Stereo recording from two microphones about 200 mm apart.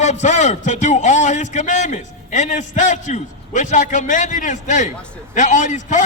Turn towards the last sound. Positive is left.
turn(degrees=35)  # may be behind; listen again after turning